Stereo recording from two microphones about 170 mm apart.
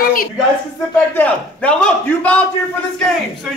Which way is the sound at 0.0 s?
55° left (ahead or behind).